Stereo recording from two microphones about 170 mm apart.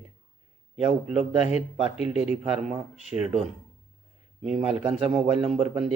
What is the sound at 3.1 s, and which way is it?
Speech, 20° right (ahead or behind).